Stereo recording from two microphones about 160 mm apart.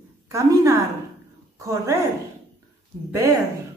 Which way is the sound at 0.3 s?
20° right (ahead or behind).